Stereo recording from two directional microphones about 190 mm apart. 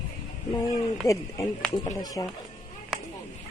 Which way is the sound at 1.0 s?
15° left (ahead or behind).